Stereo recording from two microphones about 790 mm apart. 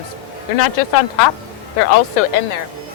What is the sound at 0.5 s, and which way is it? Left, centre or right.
Speech, left.